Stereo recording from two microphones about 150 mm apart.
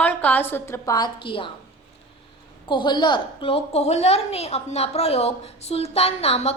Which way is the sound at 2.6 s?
30° left (ahead or behind).